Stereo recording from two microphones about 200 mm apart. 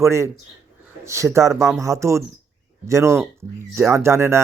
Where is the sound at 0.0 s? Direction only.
15° right (ahead or behind).